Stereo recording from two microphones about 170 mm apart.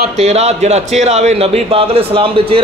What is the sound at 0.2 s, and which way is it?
A man's voice, 40° right (ahead or behind).